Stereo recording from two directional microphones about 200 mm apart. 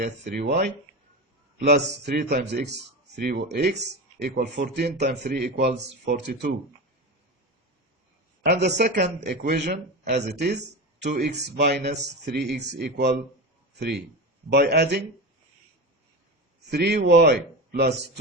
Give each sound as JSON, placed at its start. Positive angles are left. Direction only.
{"t": 0.0, "sound": "speech", "side_deg": -45}
{"t": 8.4, "sound": "speech", "side_deg": -55}
{"t": 16.7, "sound": "speech", "side_deg": -55}